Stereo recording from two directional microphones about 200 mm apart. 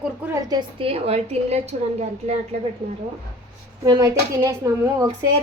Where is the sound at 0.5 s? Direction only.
30° right (ahead or behind).